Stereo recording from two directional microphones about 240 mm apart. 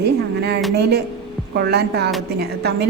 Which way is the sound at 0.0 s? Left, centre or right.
Right.